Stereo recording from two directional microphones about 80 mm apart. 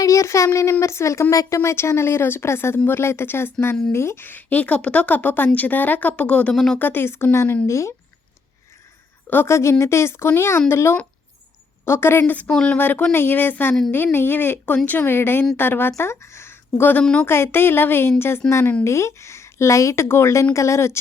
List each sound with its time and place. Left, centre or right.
0.0 s a woman's voice: left; by 6.6 s centre
6.7 s a woman's voice: left
9.3 s speech: left
12.2 s speech: centre
12.5 s speech: centre
12.7 s a woman's voice: left
17.0 s speech: centre
17.2 s a woman's voice: left